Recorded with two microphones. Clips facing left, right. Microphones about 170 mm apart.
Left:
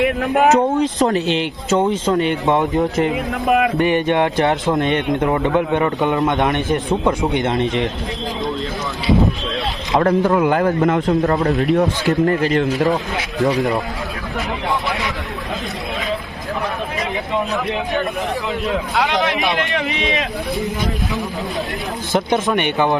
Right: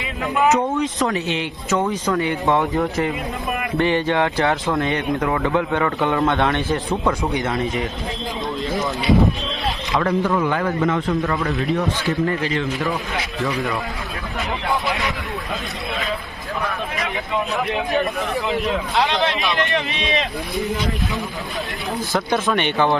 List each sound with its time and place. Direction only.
0.0 s speech: 65° left (ahead or behind)
0.5 s a man's voice: 35° left (ahead or behind)
10.0 s a man's voice: 45° left (ahead or behind)
19.3 s speech: 15° left (ahead or behind)
22.1 s speech: 20° left (ahead or behind)